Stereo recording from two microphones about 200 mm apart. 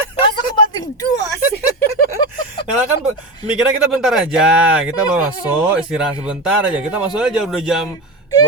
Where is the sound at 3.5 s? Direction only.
5° right (ahead or behind).